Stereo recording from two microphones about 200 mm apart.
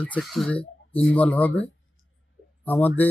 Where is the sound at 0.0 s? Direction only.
5° left (ahead or behind).